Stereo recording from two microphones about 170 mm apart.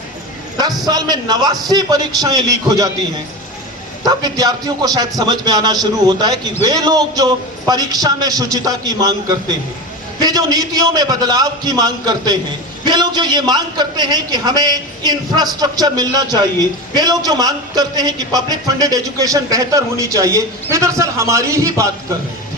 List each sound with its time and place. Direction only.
0.6 s a man's voice: 25° right (ahead or behind)
4.0 s a man's voice: 25° right (ahead or behind)
10.2 s a man's voice: 20° right (ahead or behind)